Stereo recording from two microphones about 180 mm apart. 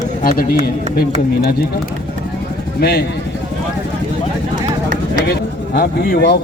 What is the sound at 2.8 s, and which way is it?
Speech, 60° left (ahead or behind).